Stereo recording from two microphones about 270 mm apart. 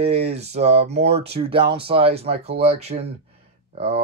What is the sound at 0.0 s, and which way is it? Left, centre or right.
Speech, right.